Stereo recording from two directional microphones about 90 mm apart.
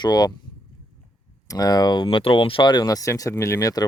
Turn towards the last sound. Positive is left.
turn(degrees=40)  # may be behind; listen again after turning